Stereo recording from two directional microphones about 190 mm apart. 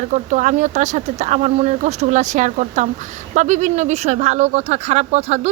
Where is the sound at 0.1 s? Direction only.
40° right (ahead or behind).